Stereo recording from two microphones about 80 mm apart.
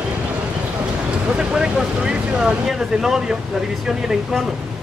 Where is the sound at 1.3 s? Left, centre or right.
Centre.